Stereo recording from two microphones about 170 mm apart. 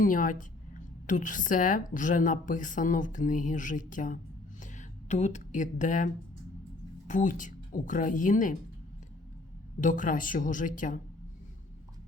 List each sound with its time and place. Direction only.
0.0 s a woman's voice: 50° left (ahead or behind)
7.1 s a woman's voice: 50° left (ahead or behind)
9.8 s a woman's voice: 50° left (ahead or behind)